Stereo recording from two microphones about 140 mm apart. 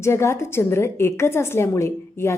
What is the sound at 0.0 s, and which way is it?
A woman's voice, 20° left (ahead or behind).